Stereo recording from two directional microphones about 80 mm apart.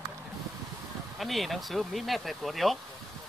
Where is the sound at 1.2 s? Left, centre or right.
Centre.